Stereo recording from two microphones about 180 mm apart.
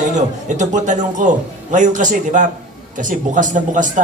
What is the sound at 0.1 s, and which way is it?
Speech, 40° right (ahead or behind).